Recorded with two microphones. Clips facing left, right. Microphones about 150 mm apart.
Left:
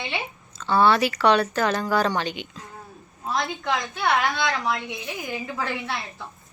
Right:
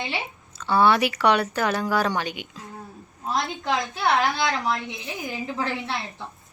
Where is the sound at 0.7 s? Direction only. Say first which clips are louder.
Even; 10° right (ahead or behind).